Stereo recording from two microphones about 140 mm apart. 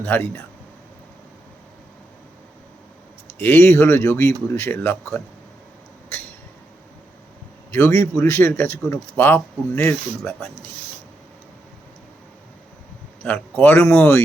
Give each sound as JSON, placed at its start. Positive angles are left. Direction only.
{"t": 0.0, "sound": "a man's voice", "side_deg": 15}
{"t": 3.4, "sound": "a man's voice", "side_deg": 15}
{"t": 7.7, "sound": "a man's voice", "side_deg": 15}
{"t": 13.2, "sound": "a man's voice", "side_deg": 10}